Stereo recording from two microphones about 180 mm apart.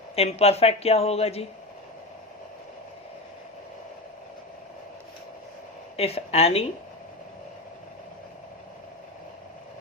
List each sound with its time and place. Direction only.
0.2 s a woman's voice: 35° left (ahead or behind)
6.0 s a woman's voice: 35° left (ahead or behind)